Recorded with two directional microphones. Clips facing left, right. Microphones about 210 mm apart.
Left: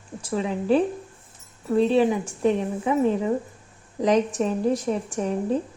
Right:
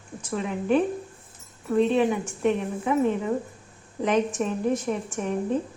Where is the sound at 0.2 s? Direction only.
30° left (ahead or behind).